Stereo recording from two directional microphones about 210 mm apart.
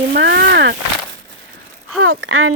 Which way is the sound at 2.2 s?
80° right.